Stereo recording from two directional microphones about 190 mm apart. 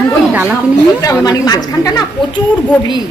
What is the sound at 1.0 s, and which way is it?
A woman's voice, 20° left (ahead or behind).